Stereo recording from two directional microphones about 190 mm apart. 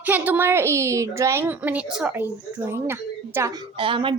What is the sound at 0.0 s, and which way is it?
A woman's voice, 10° right (ahead or behind).